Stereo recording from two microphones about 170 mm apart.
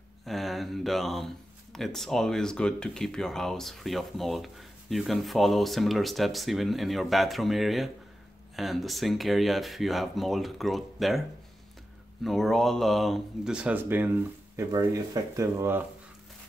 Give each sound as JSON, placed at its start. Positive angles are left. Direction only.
{"t": 0.2, "sound": "speech", "side_deg": 0}